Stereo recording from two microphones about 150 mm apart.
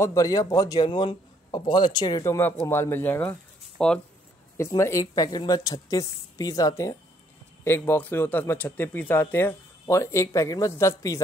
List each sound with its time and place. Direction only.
0.0 s a woman's voice: 20° left (ahead or behind)
2.2 s speech: 15° left (ahead or behind)
4.6 s a woman's voice: 15° left (ahead or behind)